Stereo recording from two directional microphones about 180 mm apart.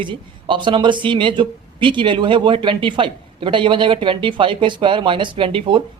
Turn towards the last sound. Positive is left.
turn(degrees=-30)  # may be behind; listen again after turning